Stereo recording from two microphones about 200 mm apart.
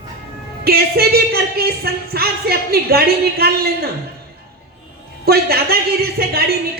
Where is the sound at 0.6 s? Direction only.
50° right (ahead or behind).